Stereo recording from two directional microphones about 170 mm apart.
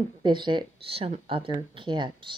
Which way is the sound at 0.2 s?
25° right (ahead or behind).